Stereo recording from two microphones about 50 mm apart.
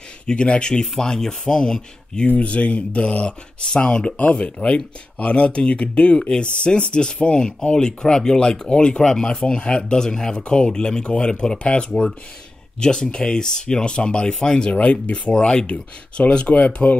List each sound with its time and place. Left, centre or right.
0.3 s speech: centre
2.2 s speech: left